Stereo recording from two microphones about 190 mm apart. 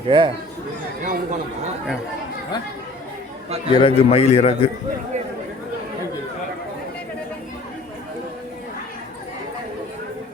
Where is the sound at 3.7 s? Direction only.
30° left (ahead or behind).